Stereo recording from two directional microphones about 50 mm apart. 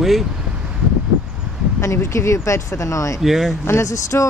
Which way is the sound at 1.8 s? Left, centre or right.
Left.